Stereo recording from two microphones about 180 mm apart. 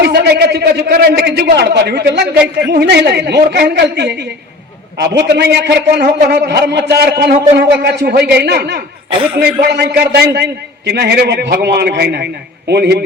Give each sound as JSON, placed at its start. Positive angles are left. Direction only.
{"t": 0.0, "sound": "a man's voice", "side_deg": -65}